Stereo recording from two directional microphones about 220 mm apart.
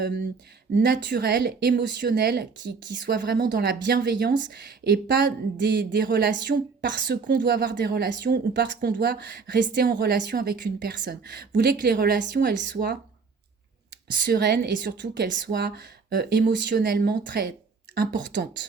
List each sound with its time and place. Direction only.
0.0 s a woman's voice: 50° right (ahead or behind)
14.3 s a woman's voice: 45° right (ahead or behind)